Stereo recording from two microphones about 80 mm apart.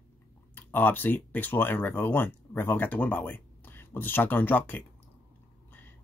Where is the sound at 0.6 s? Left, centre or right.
Left.